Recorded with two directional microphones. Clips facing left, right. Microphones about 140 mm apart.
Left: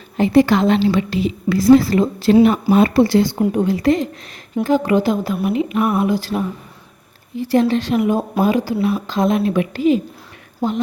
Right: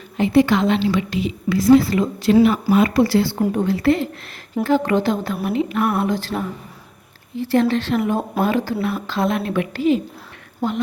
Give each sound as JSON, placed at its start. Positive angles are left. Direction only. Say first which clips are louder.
{"t": 0.2, "sound": "a woman's voice", "louder": "left 2 dB", "side_deg": 40}